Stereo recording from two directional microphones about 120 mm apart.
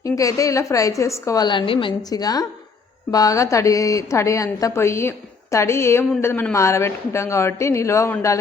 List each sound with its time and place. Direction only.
0.0 s a woman's voice: 30° left (ahead or behind)
1.5 s a woman's voice: 45° left (ahead or behind); by 8.4 s 25° left (ahead or behind)